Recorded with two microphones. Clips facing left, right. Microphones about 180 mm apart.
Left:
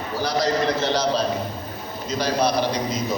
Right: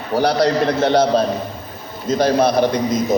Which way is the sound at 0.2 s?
65° right (ahead or behind).